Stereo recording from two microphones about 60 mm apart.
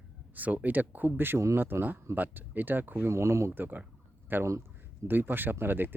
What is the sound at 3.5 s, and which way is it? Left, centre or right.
Speech, right.